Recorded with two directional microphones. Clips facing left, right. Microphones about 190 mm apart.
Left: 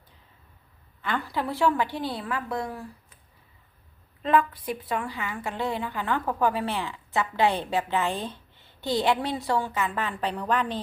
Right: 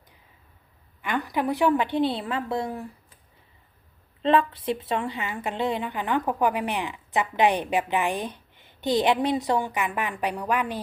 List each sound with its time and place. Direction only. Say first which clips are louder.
1.0 s a woman's voice: right 3 dB; 15° right (ahead or behind)
4.2 s a woman's voice: right 2 dB; 25° right (ahead or behind); by 10.8 s 10° right (ahead or behind)